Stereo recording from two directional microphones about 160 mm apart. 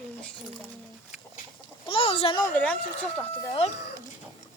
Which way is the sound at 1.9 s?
35° left (ahead or behind).